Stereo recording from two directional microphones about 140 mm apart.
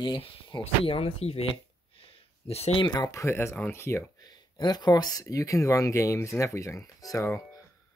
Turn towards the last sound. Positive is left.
turn(degrees=20)  # may be behind; listen again after turning